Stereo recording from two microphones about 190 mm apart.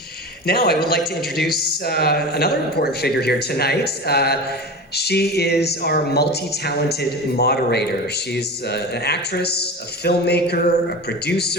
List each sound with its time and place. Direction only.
0.4 s speech: 55° left (ahead or behind)